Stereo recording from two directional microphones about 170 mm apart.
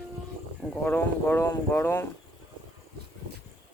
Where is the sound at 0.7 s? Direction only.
10° left (ahead or behind).